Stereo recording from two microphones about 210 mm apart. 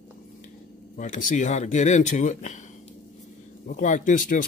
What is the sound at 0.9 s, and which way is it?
Speech, 35° left (ahead or behind).